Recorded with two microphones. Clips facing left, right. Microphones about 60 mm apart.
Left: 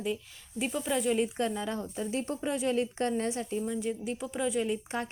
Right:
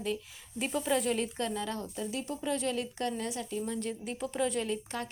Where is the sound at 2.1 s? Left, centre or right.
Left.